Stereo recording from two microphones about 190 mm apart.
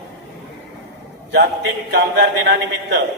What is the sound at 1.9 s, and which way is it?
Speech, 60° right (ahead or behind).